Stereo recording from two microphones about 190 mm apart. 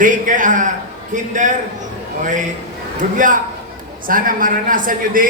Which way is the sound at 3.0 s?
45° right (ahead or behind).